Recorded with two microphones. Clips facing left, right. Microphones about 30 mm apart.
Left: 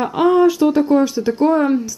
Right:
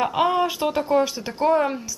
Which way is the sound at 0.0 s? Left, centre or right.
Centre.